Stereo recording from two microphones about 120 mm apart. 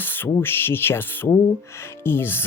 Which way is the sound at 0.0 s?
15° left (ahead or behind).